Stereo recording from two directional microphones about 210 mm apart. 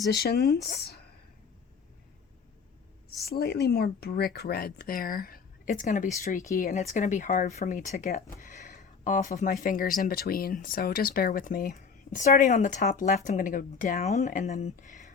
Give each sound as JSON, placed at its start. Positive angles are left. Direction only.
{"t": 0.1, "sound": "speech", "side_deg": 50}
{"t": 3.2, "sound": "speech", "side_deg": 50}